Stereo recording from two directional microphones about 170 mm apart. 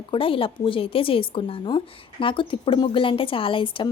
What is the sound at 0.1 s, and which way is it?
A woman's voice, 30° left (ahead or behind).